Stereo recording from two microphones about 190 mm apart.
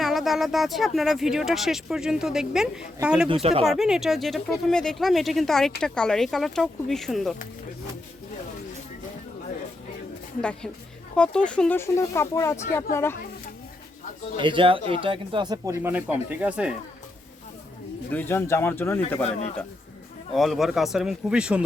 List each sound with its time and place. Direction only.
0.0 s speech: centre (ahead or behind)
3.4 s speech: 30° right (ahead or behind)
3.7 s speech: 5° right (ahead or behind)
11.2 s speech: 5° left (ahead or behind)
14.3 s speech: 25° right (ahead or behind); by 16.7 s 5° right (ahead or behind)
18.1 s speech: 10° left (ahead or behind)
19.2 s speech: 35° left (ahead or behind)
20.3 s speech: centre (ahead or behind)